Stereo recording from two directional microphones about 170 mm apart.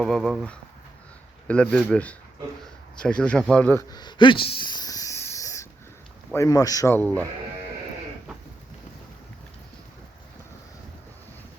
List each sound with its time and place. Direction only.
0.0 s speech: centre (ahead or behind)
1.7 s a man's voice: 5° left (ahead or behind)